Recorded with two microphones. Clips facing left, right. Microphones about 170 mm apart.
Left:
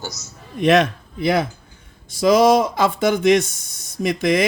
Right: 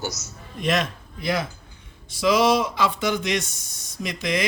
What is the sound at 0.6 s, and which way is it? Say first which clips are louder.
Speech: left 9 dB; 65° left (ahead or behind).